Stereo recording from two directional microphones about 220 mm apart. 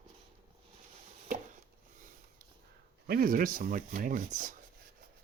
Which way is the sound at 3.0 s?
45° right (ahead or behind).